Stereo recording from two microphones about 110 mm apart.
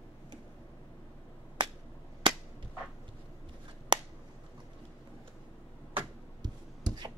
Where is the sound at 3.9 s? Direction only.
45° right (ahead or behind).